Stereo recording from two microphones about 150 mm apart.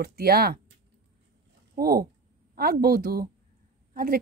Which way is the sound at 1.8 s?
85° right.